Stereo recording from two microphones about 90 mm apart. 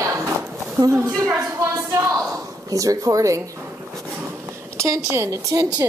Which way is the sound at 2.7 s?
40° right (ahead or behind).